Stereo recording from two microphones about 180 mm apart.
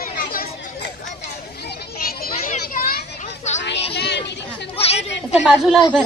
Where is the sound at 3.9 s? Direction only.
70° left (ahead or behind).